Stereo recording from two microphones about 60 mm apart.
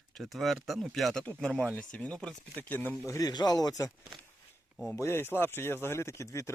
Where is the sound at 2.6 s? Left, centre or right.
Left.